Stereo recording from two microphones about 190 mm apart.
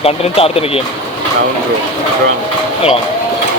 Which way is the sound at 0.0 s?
30° left (ahead or behind).